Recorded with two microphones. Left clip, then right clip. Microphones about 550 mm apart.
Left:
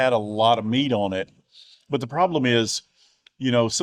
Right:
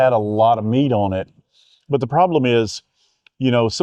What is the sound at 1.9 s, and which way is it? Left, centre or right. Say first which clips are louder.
Speech: right 6 dB; right.